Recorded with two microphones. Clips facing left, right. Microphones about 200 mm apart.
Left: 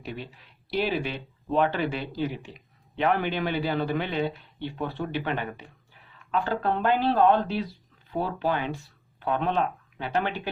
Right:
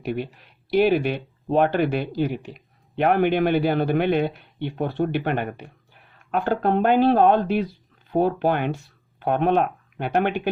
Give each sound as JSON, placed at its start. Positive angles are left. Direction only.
{"t": 0.0, "sound": "speech", "side_deg": -55}